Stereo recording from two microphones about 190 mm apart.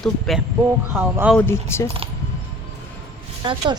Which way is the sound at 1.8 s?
30° right (ahead or behind).